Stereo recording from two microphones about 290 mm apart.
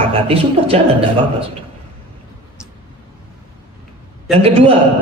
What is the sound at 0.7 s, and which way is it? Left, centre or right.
Speech, right.